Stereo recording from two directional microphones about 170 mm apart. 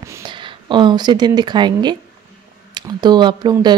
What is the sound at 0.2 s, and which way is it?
Speech, 25° right (ahead or behind).